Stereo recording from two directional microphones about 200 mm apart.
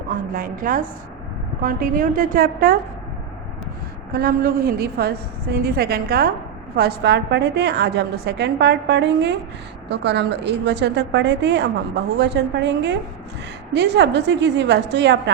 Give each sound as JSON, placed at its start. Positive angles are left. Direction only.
{"t": 0.1, "sound": "a woman's voice", "side_deg": -45}
{"t": 4.1, "sound": "a woman's voice", "side_deg": -45}